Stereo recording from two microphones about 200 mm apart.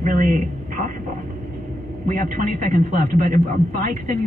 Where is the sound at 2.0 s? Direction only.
40° right (ahead or behind).